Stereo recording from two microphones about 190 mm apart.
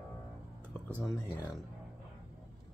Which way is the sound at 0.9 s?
10° left (ahead or behind).